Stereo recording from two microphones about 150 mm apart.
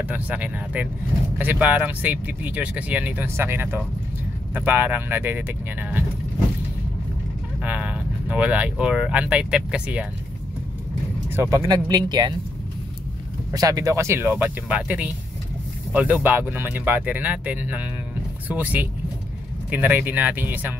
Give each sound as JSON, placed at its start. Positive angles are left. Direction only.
{"t": 0.0, "sound": "speech", "side_deg": -10}
{"t": 7.6, "sound": "speech", "side_deg": -10}
{"t": 11.2, "sound": "speech", "side_deg": -15}
{"t": 13.5, "sound": "speech", "side_deg": -25}